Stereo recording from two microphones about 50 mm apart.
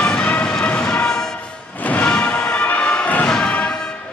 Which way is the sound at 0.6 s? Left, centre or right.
Left.